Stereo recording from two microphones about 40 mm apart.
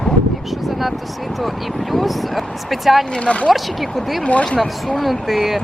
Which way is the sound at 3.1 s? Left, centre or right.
Left.